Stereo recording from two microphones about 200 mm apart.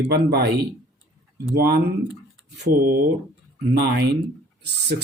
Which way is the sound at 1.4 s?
55° right (ahead or behind).